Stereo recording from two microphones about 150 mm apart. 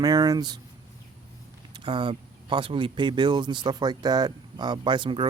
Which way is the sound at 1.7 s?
35° right (ahead or behind).